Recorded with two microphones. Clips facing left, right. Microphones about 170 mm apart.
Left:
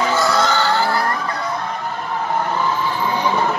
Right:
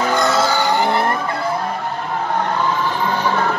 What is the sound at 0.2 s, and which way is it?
Vehicle, 5° right (ahead or behind).